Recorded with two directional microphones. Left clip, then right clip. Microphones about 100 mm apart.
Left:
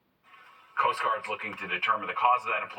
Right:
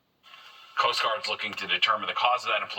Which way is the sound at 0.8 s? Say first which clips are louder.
Right 1 dB; 20° right (ahead or behind).